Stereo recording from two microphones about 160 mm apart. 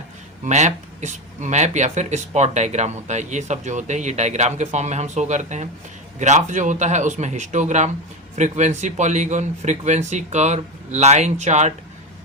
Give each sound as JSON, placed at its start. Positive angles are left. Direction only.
{"t": 0.4, "sound": "speech", "side_deg": -45}